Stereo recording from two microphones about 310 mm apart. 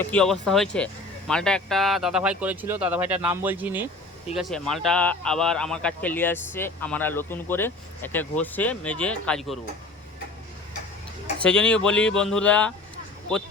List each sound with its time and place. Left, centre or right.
0.0 s speech: centre
11.4 s speech: centre